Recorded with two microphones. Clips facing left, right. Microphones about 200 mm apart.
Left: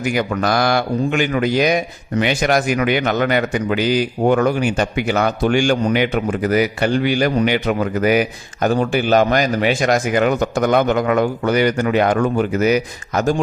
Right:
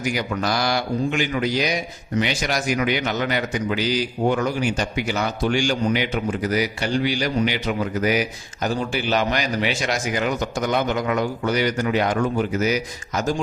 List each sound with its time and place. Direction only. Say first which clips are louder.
0.0 s a man's voice: left 5 dB; 55° left (ahead or behind)